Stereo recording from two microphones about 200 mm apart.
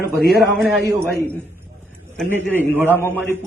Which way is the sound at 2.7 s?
10° right (ahead or behind).